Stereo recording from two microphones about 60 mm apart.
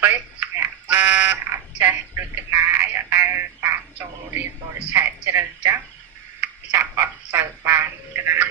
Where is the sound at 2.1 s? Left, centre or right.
Right.